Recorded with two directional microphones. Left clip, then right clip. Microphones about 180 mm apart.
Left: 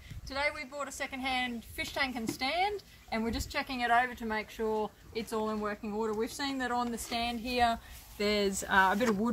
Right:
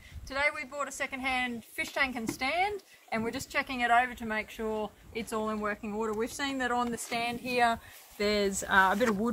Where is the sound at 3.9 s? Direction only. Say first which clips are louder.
Right 1 dB; 55° right (ahead or behind).